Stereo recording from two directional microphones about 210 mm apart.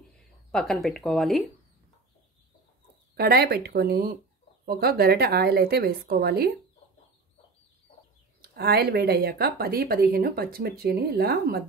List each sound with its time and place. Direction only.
0.5 s speech: centre (ahead or behind)
3.2 s speech: 50° right (ahead or behind)
8.4 s speech: 50° right (ahead or behind)